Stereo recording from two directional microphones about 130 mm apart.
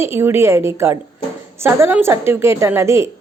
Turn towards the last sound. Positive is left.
turn(degrees=-20)  # may be behind; listen again after turning